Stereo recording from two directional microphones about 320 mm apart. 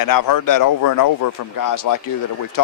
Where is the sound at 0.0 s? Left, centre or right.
Left.